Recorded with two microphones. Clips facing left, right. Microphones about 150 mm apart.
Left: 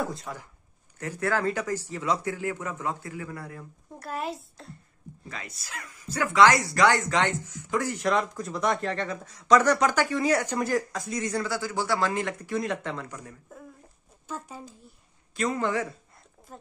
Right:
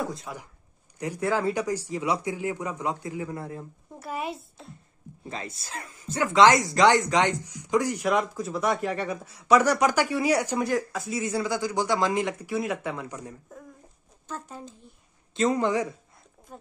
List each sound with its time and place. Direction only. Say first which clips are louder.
0.0 s speech: even; centre (ahead or behind)
0.9 s speech: right 1 dB; 15° right (ahead or behind)
4.0 s speech: even; centre (ahead or behind)
5.3 s speech: right 5 dB; 25° right (ahead or behind); by 11.4 s 5° right (ahead or behind)
11.4 s speech: right 3 dB; 15° right (ahead or behind)
14.2 s speech: even; 10° left (ahead or behind)
15.3 s speech: right 4 dB; 20° right (ahead or behind)